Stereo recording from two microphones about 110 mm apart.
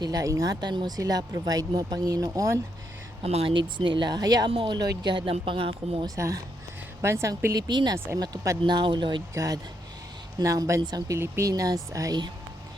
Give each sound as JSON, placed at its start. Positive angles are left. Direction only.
{"t": 0.0, "sound": "speech", "side_deg": -35}
{"t": 0.6, "sound": "speech", "side_deg": -40}
{"t": 3.2, "sound": "speech", "side_deg": -60}
{"t": 6.1, "sound": "speech", "side_deg": -25}
{"t": 7.9, "sound": "speech", "side_deg": -20}
{"t": 8.2, "sound": "speech", "side_deg": -35}
{"t": 9.3, "sound": "speech", "side_deg": -30}